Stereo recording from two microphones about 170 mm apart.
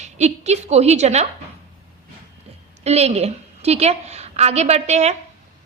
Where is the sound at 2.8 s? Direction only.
40° right (ahead or behind).